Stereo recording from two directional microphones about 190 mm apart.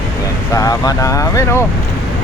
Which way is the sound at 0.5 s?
20° left (ahead or behind).